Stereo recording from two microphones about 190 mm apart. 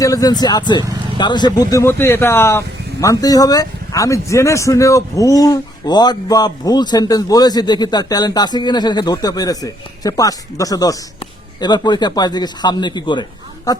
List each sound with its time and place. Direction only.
0.0 s speech: 20° left (ahead or behind)